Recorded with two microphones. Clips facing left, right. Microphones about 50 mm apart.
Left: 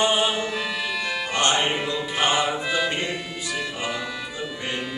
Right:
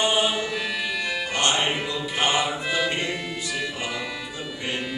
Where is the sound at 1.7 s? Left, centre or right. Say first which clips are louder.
Left 1 dB; centre.